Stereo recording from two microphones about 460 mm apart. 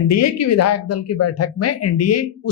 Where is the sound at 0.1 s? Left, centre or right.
Left.